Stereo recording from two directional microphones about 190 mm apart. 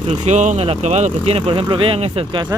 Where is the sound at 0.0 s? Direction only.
35° right (ahead or behind).